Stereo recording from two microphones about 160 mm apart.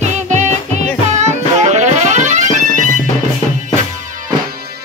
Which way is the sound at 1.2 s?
45° right (ahead or behind).